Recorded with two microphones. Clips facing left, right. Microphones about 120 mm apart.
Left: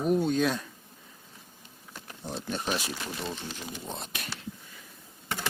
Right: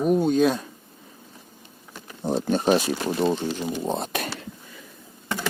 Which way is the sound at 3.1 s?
45° right (ahead or behind).